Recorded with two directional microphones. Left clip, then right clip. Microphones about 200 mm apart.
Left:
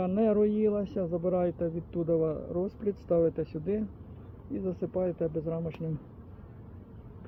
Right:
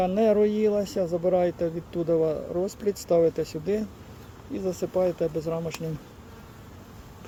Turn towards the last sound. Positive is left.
turn(degrees=-15)  # may be behind; listen again after turning